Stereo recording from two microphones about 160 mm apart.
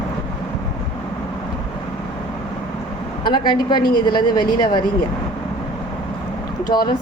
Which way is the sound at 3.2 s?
30° left (ahead or behind).